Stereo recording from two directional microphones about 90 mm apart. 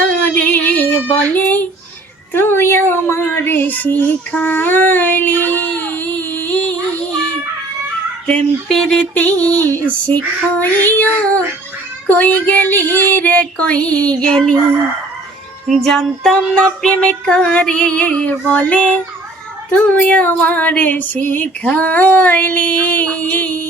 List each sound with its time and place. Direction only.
0.0 s child singing: 15° left (ahead or behind)
2.3 s a sound: 25° left (ahead or behind)
8.3 s female singing: 10° left (ahead or behind)
10.8 s a sound: 20° left (ahead or behind)
12.0 s female singing: 15° left (ahead or behind)
15.7 s female singing: 5° left (ahead or behind); by 23.6 s 20° left (ahead or behind)